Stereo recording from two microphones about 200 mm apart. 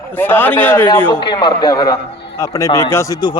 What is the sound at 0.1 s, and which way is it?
Speech, 10° left (ahead or behind).